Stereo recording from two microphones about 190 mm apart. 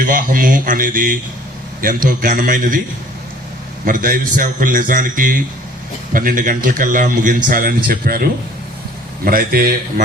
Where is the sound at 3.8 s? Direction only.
45° right (ahead or behind).